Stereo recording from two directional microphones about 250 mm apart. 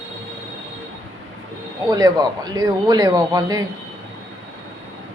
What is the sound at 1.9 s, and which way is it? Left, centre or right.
A woman's voice, centre.